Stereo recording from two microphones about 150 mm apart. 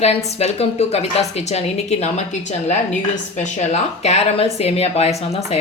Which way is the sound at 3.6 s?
45° left (ahead or behind).